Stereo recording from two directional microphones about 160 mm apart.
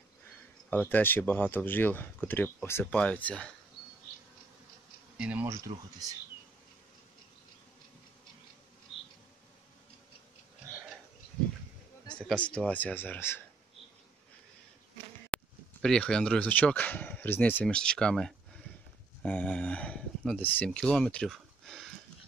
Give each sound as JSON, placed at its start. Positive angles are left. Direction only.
{"t": 0.7, "sound": "speech", "side_deg": 10}
{"t": 5.1, "sound": "speech", "side_deg": -5}
{"t": 8.9, "sound": "insect", "side_deg": 35}
{"t": 12.2, "sound": "speech", "side_deg": 5}
{"t": 15.3, "sound": "speech", "side_deg": 5}